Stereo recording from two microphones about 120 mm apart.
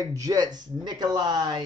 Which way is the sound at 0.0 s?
30° right (ahead or behind).